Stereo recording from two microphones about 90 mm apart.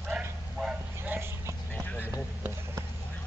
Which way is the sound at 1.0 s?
25° right (ahead or behind).